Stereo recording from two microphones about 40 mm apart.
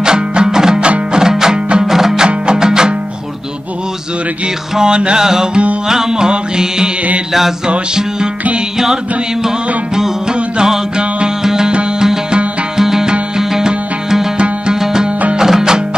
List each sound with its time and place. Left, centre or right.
0.0 s music: centre
2.2 s music: centre
4.7 s music: right
10.6 s music: right
15.3 s music: centre